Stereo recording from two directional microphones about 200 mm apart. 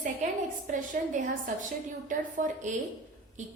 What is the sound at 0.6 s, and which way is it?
A woman's voice, 40° right (ahead or behind).